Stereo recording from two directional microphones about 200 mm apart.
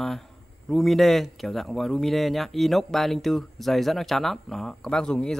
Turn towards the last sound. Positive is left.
turn(degrees=5)  # may be behind; listen again after turning